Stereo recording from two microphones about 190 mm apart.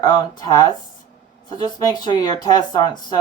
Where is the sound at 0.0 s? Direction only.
20° left (ahead or behind).